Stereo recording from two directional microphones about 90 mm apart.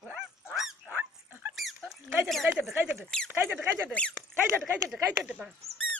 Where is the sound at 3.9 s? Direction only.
15° left (ahead or behind).